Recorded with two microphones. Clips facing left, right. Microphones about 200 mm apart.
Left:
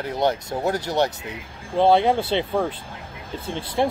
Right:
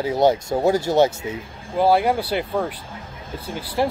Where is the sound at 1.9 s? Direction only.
5° right (ahead or behind).